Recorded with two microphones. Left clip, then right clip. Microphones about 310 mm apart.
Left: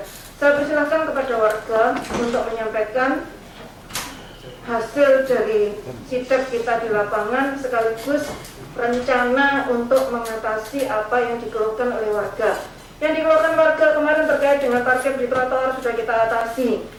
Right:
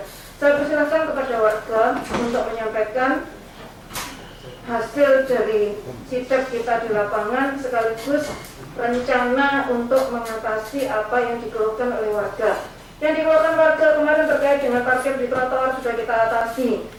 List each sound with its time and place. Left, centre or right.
0.3 s a man's voice: centre
4.7 s a man's voice: centre